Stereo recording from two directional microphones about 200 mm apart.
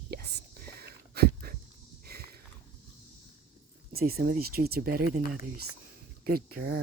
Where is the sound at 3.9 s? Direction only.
50° right (ahead or behind).